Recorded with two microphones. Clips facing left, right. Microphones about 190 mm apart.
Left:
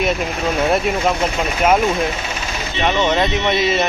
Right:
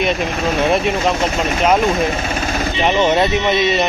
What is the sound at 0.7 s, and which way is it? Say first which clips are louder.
Speech: right 1 dB; 5° left (ahead or behind).